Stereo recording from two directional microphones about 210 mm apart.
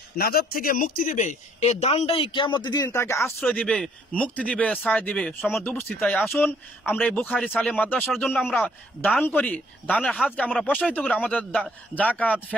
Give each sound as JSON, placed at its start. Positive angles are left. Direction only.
{"t": 0.2, "sound": "speech", "side_deg": 45}
{"t": 3.3, "sound": "speech", "side_deg": 0}